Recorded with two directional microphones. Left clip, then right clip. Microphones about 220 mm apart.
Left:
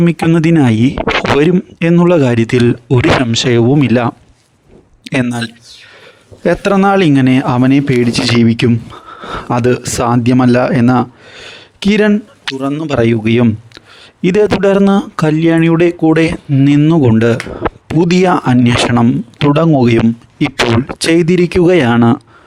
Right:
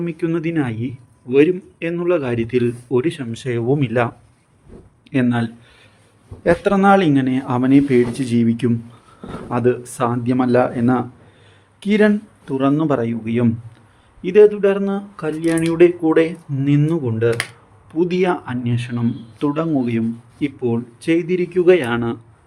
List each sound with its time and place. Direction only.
0.0 s speech: 50° left (ahead or behind)
6.4 s speech: 45° left (ahead or behind)
21.0 s speech: 50° left (ahead or behind)